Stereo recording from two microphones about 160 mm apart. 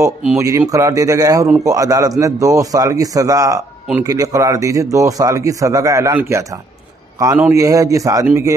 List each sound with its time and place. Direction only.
0.4 s a man's voice: 20° right (ahead or behind)